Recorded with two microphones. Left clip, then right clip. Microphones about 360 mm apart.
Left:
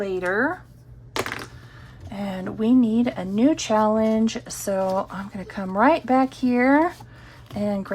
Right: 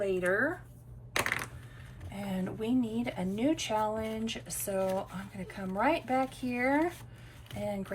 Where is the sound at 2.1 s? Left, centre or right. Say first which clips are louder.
Left 8 dB; centre.